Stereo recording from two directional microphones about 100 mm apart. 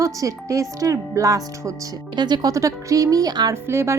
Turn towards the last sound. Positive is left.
turn(degrees=-25)  # may be behind; listen again after turning